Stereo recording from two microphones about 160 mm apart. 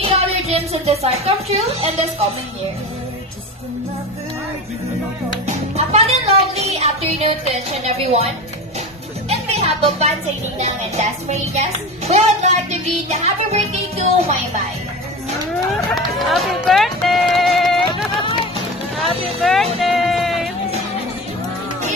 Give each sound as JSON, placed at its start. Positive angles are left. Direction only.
{"t": 0.0, "sound": "music", "side_deg": -40}
{"t": 1.8, "sound": "a woman's voice", "side_deg": -40}
{"t": 5.8, "sound": "a sound", "side_deg": -40}
{"t": 9.3, "sound": "speech", "side_deg": -40}
{"t": 10.6, "sound": "music", "side_deg": -45}
{"t": 15.7, "sound": "speech", "side_deg": 0}
{"t": 17.8, "sound": "run", "side_deg": 35}
{"t": 19.2, "sound": "speech", "side_deg": 0}
{"t": 19.8, "sound": "music", "side_deg": 0}